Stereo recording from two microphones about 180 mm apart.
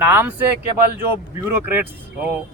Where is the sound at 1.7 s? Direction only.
10° right (ahead or behind).